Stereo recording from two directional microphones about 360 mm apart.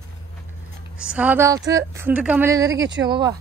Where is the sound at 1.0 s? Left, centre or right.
Centre.